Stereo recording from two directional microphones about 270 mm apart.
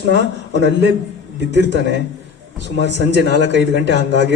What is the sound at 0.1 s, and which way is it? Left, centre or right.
Speech, left.